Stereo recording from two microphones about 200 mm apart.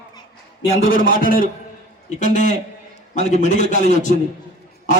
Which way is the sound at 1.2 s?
45° left (ahead or behind).